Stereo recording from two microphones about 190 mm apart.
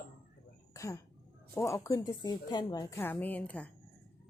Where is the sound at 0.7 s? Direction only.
15° left (ahead or behind).